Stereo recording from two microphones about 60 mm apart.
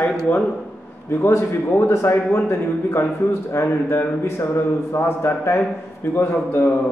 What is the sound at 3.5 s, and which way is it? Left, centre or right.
A man's voice, left.